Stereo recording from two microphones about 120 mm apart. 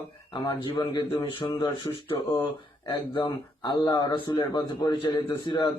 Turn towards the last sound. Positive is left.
turn(degrees=40)  # may be behind; listen again after turning